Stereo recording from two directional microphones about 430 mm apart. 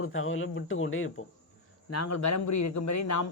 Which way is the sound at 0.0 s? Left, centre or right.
Left.